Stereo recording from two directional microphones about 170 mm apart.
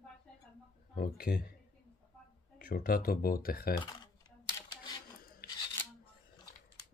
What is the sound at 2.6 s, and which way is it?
Speech, 60° left (ahead or behind).